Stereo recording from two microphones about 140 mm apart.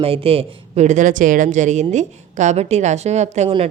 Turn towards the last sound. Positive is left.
turn(degrees=-55)  # may be behind; listen again after turning